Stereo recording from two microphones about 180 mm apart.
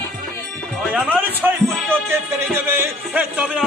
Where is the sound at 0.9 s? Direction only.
10° right (ahead or behind).